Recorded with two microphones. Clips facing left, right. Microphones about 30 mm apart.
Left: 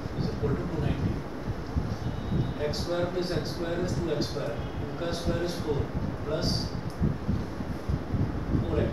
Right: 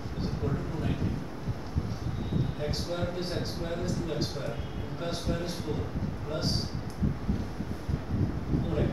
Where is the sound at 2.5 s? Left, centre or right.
Centre.